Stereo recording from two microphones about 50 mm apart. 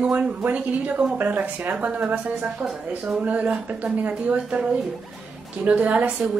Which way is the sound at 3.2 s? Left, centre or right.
Right.